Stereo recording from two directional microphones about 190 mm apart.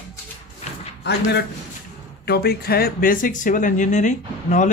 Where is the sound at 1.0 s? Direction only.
65° left (ahead or behind).